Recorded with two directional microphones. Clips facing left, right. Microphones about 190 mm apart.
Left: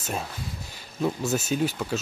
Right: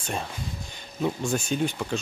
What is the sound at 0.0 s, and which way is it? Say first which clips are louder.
Speech: even; 5° left (ahead or behind).